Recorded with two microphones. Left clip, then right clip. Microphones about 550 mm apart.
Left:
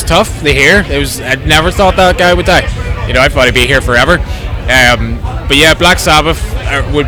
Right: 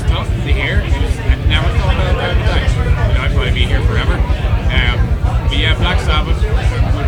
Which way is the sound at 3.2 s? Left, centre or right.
Left.